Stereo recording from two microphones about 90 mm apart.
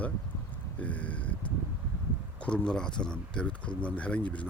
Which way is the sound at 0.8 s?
15° left (ahead or behind).